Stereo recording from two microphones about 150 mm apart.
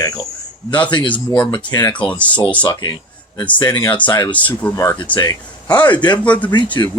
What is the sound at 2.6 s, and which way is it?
Speech, 30° left (ahead or behind).